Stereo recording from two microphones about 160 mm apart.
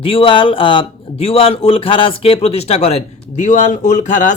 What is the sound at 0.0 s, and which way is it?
A man's voice, 35° left (ahead or behind).